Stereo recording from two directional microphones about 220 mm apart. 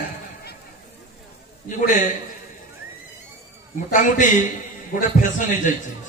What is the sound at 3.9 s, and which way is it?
A man's voice, 35° left (ahead or behind).